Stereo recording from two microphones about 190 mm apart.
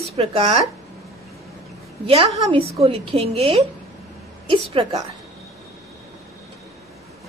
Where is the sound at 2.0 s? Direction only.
30° right (ahead or behind).